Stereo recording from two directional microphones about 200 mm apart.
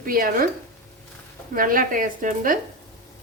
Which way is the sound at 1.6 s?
45° right (ahead or behind).